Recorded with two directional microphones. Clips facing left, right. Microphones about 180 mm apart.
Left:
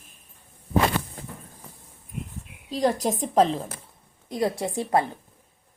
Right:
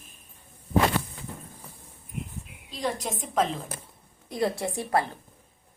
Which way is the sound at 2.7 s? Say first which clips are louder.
Left 7 dB; 40° left (ahead or behind).